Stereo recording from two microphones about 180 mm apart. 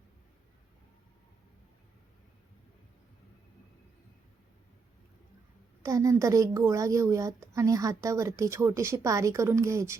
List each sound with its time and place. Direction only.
5.8 s a woman's voice: 15° right (ahead or behind)